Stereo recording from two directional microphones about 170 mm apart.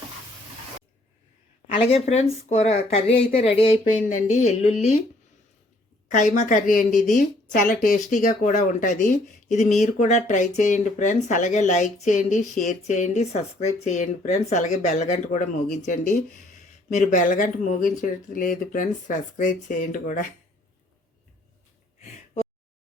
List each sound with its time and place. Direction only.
1.9 s speech: 40° left (ahead or behind)
6.1 s speech: 45° left (ahead or behind)